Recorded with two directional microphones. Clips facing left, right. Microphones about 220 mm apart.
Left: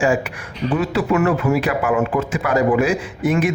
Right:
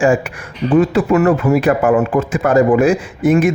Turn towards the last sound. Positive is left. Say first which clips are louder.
# right 6 dB
turn(degrees=-50)  # may be behind; listen again after turning